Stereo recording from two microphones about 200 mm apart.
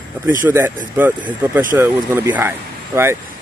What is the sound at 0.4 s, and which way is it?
Speech, 15° right (ahead or behind).